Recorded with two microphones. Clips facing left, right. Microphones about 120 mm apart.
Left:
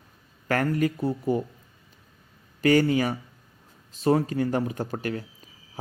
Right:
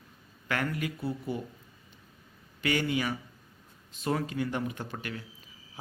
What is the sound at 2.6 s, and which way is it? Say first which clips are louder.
A man's voice: left 9 dB; 40° left (ahead or behind).